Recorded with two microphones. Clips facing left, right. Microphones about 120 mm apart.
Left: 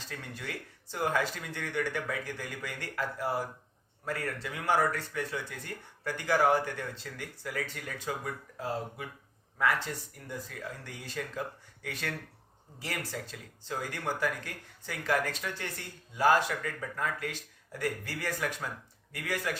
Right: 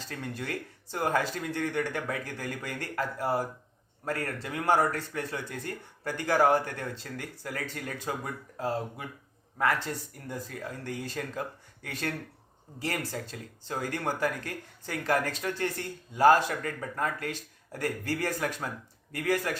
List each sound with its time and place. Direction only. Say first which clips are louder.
0.1 s speech: right 5 dB; 45° right (ahead or behind)